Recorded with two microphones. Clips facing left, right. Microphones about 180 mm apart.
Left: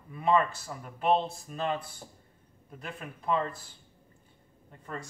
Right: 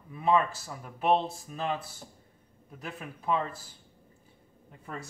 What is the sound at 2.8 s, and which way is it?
Speech, 5° right (ahead or behind).